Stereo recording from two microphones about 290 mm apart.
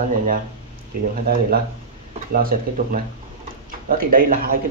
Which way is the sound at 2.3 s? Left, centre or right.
Right.